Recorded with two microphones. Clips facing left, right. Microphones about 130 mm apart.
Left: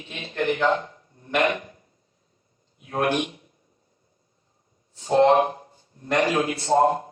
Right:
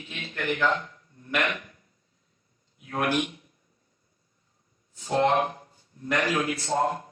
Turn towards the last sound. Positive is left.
turn(degrees=30)  # may be behind; listen again after turning